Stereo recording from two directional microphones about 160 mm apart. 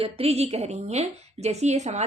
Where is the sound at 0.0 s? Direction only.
40° right (ahead or behind).